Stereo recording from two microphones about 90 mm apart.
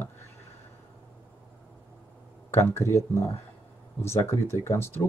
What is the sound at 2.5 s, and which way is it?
Speech, 30° left (ahead or behind).